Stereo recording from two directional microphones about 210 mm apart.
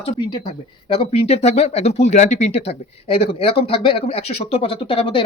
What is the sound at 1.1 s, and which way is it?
Speech, 30° left (ahead or behind).